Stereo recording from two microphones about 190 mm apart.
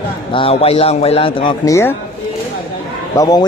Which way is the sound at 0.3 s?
30° left (ahead or behind).